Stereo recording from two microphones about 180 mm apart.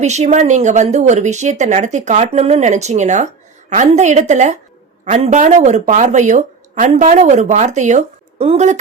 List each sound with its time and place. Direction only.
0.0 s speech: 40° right (ahead or behind)